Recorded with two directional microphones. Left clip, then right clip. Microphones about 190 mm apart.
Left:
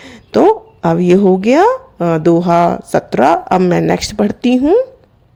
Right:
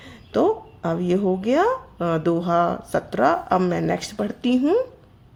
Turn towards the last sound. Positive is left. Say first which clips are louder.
# left 9 dB
turn(degrees=35)  # may be behind; listen again after turning